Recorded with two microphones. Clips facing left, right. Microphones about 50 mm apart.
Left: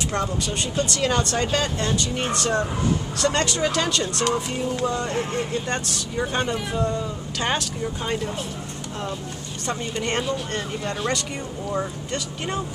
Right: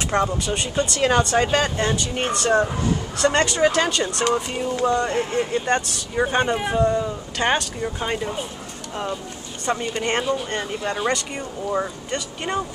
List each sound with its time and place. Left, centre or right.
0.1 s speech: centre
6.1 s speech: right
6.8 s speech: centre
9.7 s speech: centre